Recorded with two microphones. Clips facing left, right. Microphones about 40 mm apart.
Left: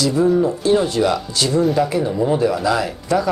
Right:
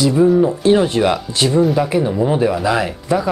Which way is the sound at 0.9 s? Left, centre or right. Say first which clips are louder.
Right 2 dB; right.